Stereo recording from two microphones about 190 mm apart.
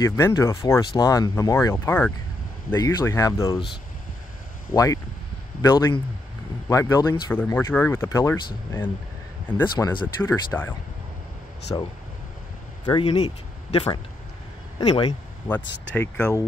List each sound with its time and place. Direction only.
0.0 s speech: 15° left (ahead or behind)
4.7 s speech: 20° left (ahead or behind)
9.6 s speech: 15° left (ahead or behind)
11.7 s speech: 15° left (ahead or behind)
15.9 s speech: 5° left (ahead or behind)